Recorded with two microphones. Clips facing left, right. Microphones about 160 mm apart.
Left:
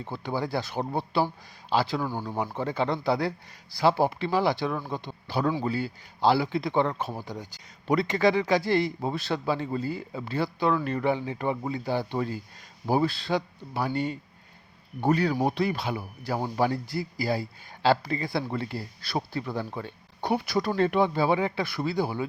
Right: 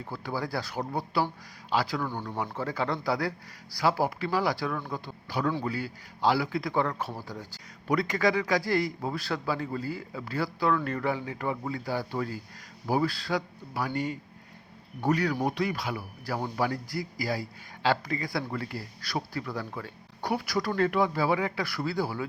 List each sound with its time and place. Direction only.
0.0 s speech: 25° left (ahead or behind)
2.0 s speech: 10° left (ahead or behind)
2.4 s speech: 20° left (ahead or behind)